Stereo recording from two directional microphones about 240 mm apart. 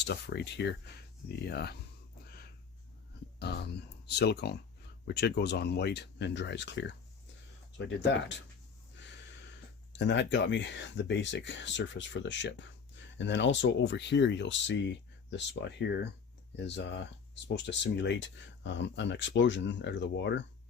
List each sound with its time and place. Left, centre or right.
0.0 s speech: left
4.0 s speech: left
10.0 s speech: left